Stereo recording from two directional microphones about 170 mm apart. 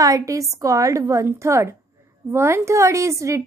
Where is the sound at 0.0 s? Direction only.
20° right (ahead or behind).